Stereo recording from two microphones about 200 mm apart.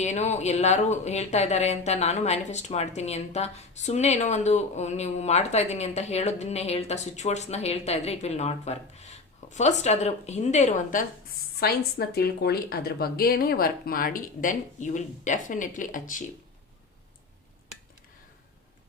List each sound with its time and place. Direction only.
0.0 s speech: 35° left (ahead or behind)
11.6 s speech: 50° left (ahead or behind)